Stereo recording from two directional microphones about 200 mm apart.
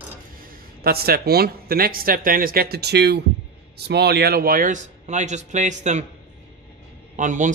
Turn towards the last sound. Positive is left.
turn(degrees=-40)  # may be behind; listen again after turning